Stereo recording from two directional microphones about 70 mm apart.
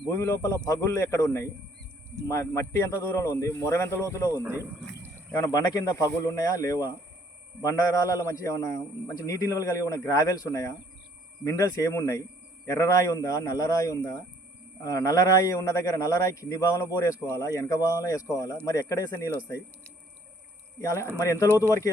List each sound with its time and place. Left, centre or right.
0.1 s a man's voice: left
4.4 s speech: right
5.4 s a man's voice: left
8.1 s a man's voice: left
21.2 s a man's voice: left
21.4 s speech: right
21.7 s a man's voice: left